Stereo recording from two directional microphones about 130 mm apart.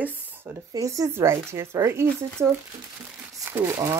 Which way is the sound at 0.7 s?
25° right (ahead or behind).